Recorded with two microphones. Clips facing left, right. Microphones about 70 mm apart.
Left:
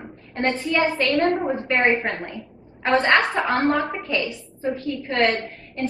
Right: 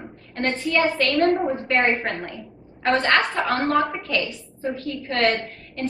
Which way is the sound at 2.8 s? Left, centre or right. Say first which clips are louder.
Left 1 dB; left.